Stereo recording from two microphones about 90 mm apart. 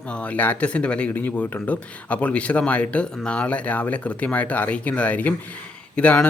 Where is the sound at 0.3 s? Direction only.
15° left (ahead or behind).